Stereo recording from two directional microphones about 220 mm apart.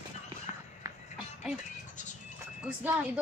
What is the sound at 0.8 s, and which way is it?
Music, 15° right (ahead or behind).